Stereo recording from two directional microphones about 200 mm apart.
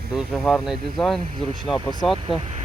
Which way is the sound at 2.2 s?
30° right (ahead or behind).